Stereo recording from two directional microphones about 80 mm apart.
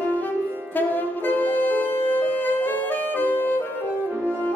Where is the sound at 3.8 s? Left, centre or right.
Right.